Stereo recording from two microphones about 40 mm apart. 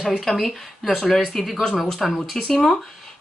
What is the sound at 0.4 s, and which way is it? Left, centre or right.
A woman's voice, centre.